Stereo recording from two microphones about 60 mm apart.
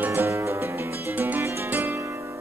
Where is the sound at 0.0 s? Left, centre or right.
Right.